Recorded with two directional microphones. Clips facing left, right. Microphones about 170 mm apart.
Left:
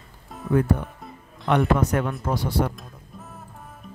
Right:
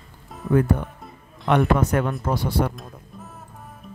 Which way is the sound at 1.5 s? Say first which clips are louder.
Right 1 dB; 55° right (ahead or behind).